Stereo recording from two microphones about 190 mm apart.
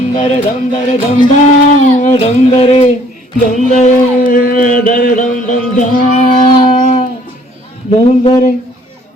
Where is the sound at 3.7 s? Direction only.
45° left (ahead or behind).